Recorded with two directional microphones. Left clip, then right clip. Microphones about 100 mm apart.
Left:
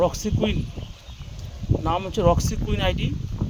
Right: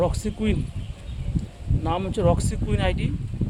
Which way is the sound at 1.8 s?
15° left (ahead or behind).